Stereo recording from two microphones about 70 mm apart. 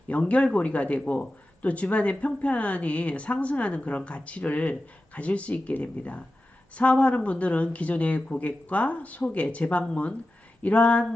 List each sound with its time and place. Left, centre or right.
0.1 s a man's voice: centre